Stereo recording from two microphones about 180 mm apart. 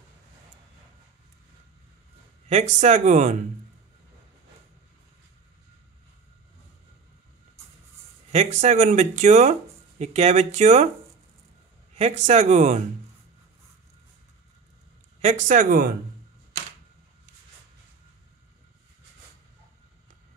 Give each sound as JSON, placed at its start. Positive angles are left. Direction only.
{"t": 2.4, "sound": "speech", "side_deg": -40}
{"t": 8.3, "sound": "speech", "side_deg": -40}
{"t": 11.9, "sound": "speech", "side_deg": -40}
{"t": 15.1, "sound": "speech", "side_deg": -40}